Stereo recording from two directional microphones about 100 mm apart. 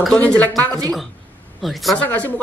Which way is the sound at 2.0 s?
15° left (ahead or behind).